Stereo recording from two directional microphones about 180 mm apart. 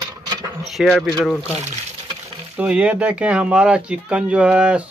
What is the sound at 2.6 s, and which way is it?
Speech, 5° right (ahead or behind).